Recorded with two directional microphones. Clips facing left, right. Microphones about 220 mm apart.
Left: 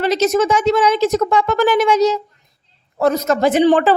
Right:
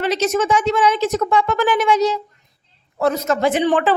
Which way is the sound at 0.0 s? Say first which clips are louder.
Left 3 dB; 40° left (ahead or behind).